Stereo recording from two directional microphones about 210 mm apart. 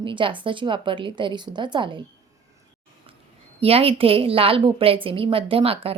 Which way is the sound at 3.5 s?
30° right (ahead or behind).